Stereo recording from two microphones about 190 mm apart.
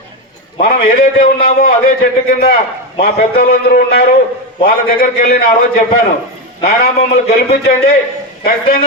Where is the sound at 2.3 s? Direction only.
50° left (ahead or behind).